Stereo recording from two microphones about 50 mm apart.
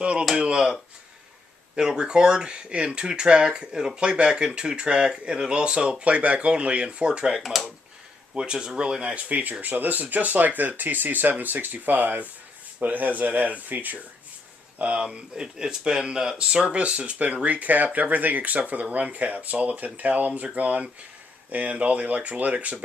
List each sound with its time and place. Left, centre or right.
0.0 s speech: right
7.4 s speech: centre
8.4 s speech: centre
9.3 s speech: right